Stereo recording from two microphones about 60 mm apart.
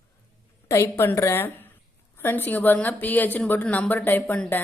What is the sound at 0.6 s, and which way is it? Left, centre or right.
Speech, left.